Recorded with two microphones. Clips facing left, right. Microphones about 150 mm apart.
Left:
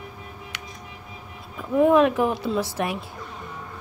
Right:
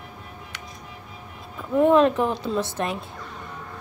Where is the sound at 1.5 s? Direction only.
5° left (ahead or behind).